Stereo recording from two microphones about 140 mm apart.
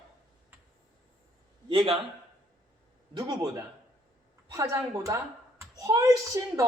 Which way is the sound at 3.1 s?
25° right (ahead or behind).